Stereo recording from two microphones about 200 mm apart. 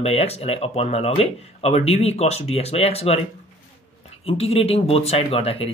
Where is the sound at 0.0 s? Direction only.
30° left (ahead or behind).